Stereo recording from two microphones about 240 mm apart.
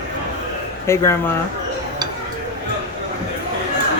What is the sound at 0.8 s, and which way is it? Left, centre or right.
Speech, centre.